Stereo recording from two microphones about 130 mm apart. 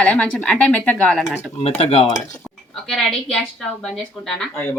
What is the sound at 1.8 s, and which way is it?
Speech, 50° left (ahead or behind).